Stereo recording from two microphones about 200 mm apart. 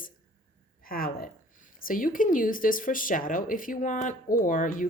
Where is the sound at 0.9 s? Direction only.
45° left (ahead or behind).